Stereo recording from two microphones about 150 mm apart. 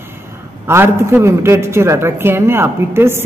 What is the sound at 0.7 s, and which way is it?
Speech, 15° right (ahead or behind).